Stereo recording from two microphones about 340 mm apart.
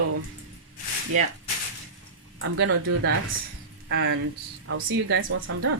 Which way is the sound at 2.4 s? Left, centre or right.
Right.